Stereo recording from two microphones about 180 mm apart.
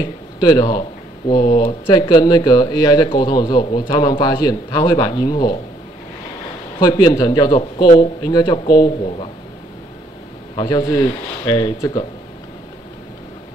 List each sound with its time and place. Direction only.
0.4 s speech: 25° left (ahead or behind)
6.8 s speech: 20° left (ahead or behind)
10.5 s speech: 25° left (ahead or behind)